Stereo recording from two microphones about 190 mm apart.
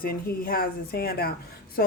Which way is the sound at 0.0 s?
50° left (ahead or behind).